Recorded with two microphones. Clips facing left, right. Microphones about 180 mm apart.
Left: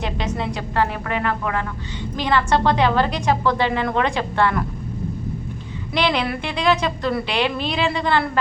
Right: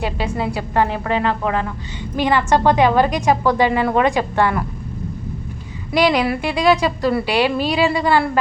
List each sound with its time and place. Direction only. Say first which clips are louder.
0.3 s a woman's voice: right 3 dB; 5° right (ahead or behind)
1.0 s speech: right 4 dB; 30° right (ahead or behind)
2.1 s a woman's voice: right 3 dB; 10° right (ahead or behind)
5.9 s a woman's voice: right 5 dB; 10° right (ahead or behind)